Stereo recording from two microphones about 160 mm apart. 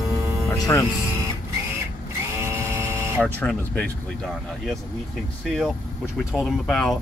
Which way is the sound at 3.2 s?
5° left (ahead or behind).